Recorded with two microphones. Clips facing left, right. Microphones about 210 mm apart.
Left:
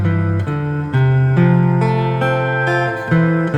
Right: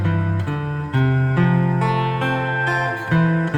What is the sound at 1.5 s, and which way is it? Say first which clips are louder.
Music: left 5 dB; 45° left (ahead or behind).